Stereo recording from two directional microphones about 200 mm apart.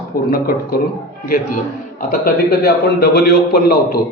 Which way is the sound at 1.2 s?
45° left (ahead or behind).